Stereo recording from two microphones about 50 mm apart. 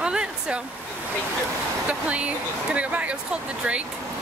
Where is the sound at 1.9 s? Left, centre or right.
Right.